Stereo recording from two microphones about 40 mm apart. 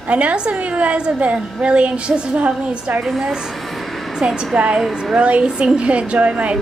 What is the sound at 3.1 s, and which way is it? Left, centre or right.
A woman's voice, centre.